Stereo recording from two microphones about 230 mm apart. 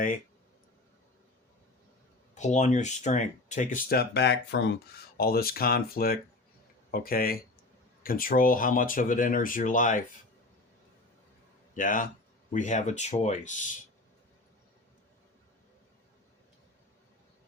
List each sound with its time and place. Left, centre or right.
2.3 s speech: left
11.7 s speech: left